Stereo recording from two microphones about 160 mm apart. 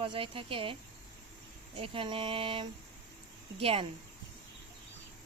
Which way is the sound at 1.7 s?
35° right (ahead or behind).